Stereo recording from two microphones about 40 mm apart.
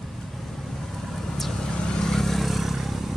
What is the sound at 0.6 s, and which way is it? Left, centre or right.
Vehicle, centre.